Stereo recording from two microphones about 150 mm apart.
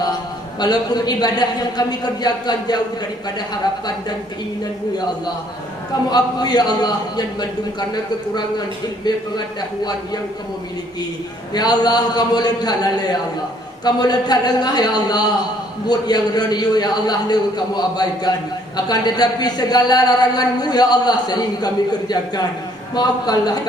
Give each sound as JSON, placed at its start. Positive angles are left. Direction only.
{"t": 0.6, "sound": "a man's voice", "side_deg": 25}
{"t": 6.1, "sound": "a man's voice", "side_deg": 25}
{"t": 9.1, "sound": "a man's voice", "side_deg": 30}
{"t": 11.5, "sound": "a man's voice", "side_deg": 25}
{"t": 23.0, "sound": "a man's voice", "side_deg": 25}